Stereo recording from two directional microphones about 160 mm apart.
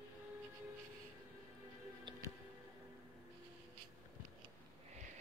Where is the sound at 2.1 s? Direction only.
30° right (ahead or behind).